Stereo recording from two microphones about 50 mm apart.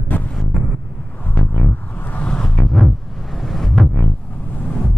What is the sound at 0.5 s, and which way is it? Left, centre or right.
Vehicle, centre.